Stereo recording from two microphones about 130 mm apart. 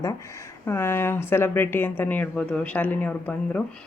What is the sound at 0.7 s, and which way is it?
A woman's voice, 20° left (ahead or behind).